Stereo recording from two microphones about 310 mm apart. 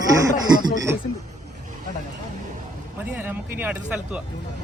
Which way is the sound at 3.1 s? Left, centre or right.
Centre.